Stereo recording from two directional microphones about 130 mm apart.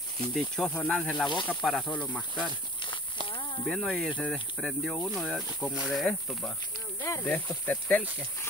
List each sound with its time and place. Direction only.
0.3 s speech: centre (ahead or behind)
3.3 s snake: 40° left (ahead or behind)
3.6 s speech: centre (ahead or behind)
7.0 s snake: 25° left (ahead or behind)
7.2 s speech: 15° left (ahead or behind)